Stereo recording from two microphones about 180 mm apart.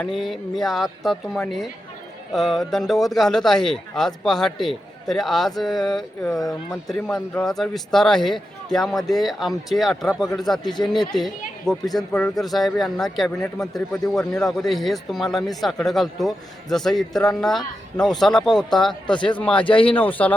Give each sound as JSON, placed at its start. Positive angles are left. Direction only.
{"t": 0.0, "sound": "a man's voice", "side_deg": 5}
{"t": 10.6, "sound": "speech", "side_deg": 25}
{"t": 11.2, "sound": "a man's voice", "side_deg": 0}